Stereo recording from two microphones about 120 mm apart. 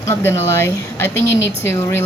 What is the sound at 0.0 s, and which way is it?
A woman's voice, 20° left (ahead or behind).